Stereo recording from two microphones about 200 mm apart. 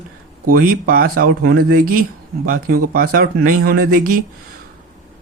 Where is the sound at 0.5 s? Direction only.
45° right (ahead or behind).